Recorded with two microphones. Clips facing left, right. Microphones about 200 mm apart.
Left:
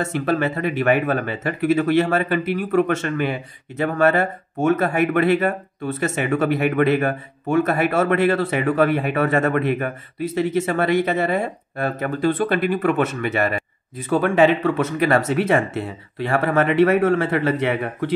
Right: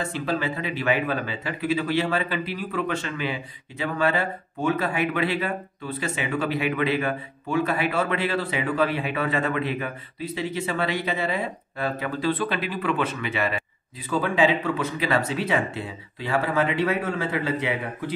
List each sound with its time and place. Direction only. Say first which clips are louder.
0.0 s speech: left 6 dB; 50° left (ahead or behind)
14.1 s a man's voice: left 6 dB; 60° left (ahead or behind)